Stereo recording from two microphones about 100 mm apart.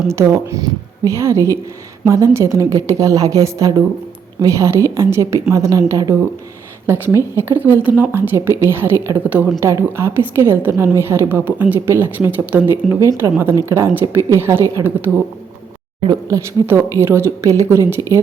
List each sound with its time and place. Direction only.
0.1 s a woman's voice: 25° right (ahead or behind)
16.0 s a woman's voice: 35° right (ahead or behind)